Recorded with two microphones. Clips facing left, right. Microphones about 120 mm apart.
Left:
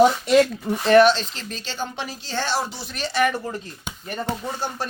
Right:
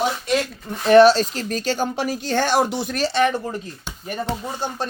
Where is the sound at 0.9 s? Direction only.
40° right (ahead or behind); by 3.0 s 55° right (ahead or behind).